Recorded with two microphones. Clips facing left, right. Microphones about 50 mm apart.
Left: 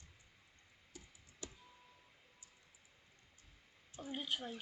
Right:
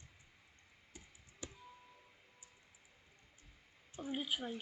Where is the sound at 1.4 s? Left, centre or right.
Right.